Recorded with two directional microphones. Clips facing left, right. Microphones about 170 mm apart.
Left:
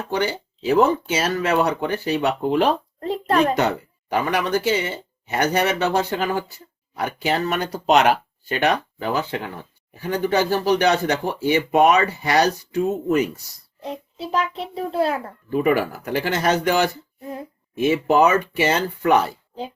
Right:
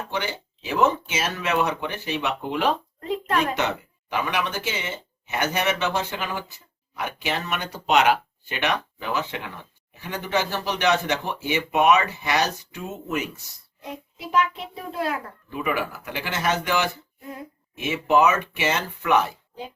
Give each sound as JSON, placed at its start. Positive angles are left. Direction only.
{"t": 0.1, "sound": "speech", "side_deg": 40}